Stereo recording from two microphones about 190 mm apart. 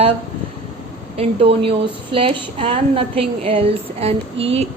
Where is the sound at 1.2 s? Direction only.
30° right (ahead or behind).